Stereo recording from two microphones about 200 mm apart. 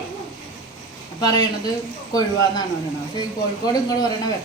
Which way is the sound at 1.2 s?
20° left (ahead or behind).